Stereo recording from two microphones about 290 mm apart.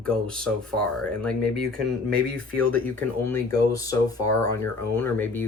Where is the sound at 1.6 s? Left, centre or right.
Right.